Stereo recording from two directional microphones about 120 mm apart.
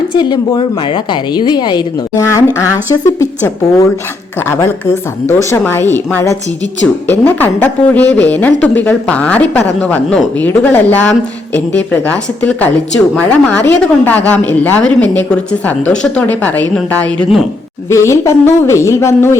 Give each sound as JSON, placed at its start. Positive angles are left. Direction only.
{"t": 0.1, "sound": "a woman's voice", "side_deg": 40}
{"t": 2.1, "sound": "speech", "side_deg": 25}
{"t": 5.3, "sound": "speech", "side_deg": 25}
{"t": 17.8, "sound": "speech", "side_deg": 25}